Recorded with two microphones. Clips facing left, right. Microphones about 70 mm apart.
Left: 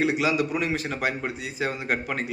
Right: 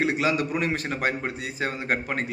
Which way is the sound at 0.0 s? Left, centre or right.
Right.